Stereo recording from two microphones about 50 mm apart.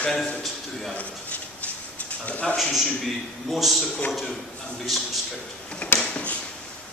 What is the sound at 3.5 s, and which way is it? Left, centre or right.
Speech, centre.